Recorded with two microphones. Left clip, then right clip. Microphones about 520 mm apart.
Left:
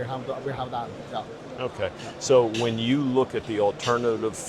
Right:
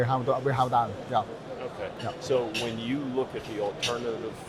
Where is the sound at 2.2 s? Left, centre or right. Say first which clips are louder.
Left 8 dB; left.